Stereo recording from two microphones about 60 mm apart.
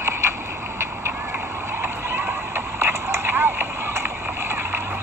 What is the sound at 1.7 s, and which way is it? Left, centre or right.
Horse, right.